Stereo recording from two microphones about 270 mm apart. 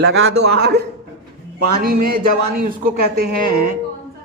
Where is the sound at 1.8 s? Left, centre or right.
Right.